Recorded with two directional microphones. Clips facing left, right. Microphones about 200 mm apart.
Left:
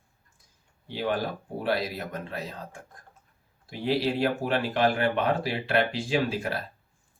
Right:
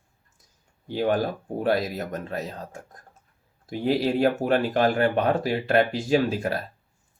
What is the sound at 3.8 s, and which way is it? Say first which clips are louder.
Speech: right 4 dB; 45° right (ahead or behind).